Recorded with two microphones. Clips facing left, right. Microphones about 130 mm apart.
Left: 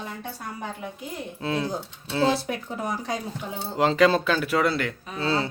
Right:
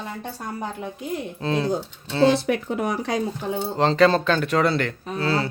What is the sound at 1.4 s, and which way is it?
Speech, 5° left (ahead or behind).